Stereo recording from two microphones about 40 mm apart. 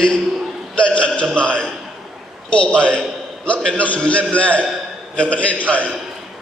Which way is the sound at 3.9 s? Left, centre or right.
Left.